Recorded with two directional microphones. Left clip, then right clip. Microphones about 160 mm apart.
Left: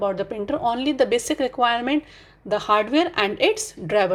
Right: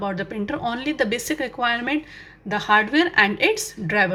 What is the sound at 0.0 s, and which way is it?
A woman's voice, 25° left (ahead or behind).